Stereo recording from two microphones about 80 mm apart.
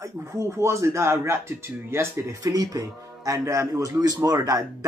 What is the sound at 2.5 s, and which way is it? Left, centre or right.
A man's voice, right.